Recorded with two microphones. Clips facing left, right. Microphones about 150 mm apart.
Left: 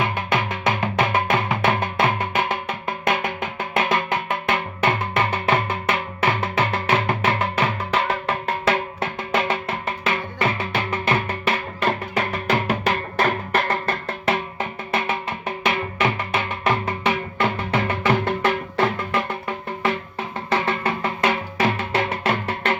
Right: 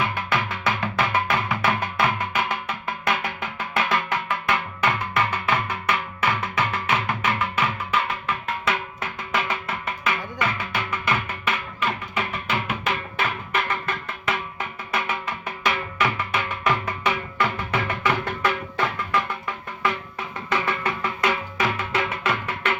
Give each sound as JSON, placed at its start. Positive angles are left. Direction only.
{"t": 0.0, "sound": "music", "side_deg": 20}